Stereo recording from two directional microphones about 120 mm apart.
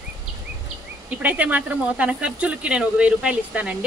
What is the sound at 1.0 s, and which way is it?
Speech, 10° right (ahead or behind).